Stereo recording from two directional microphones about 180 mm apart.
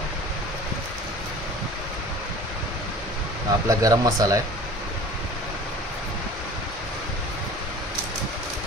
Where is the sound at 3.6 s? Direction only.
20° right (ahead or behind).